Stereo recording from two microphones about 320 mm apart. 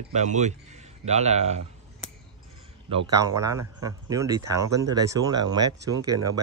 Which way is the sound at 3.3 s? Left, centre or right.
Centre.